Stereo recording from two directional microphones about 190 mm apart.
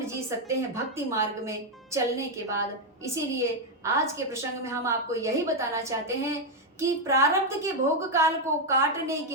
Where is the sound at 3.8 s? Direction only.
15° right (ahead or behind).